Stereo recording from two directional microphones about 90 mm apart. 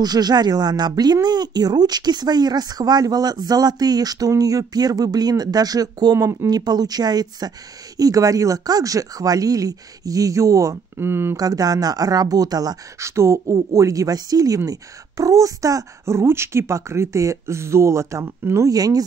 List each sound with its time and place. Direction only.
0.0 s speech: 50° right (ahead or behind)
6.1 s a woman's voice: 35° right (ahead or behind)
6.5 s a woman's voice: 50° right (ahead or behind)
11.0 s speech: 25° right (ahead or behind)
11.3 s speech: 45° right (ahead or behind)
13.1 s a woman's voice: 30° right (ahead or behind)
18.7 s speech: 45° right (ahead or behind)